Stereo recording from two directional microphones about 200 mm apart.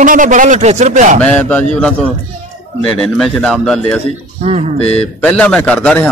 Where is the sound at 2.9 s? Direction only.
5° left (ahead or behind).